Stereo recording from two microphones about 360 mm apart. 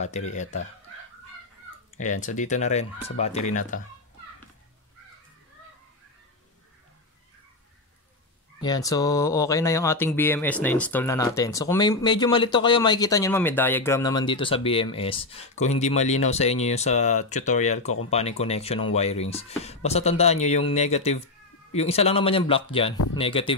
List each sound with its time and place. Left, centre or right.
0.0 s speech: centre
2.0 s speech: centre
8.5 s speech: centre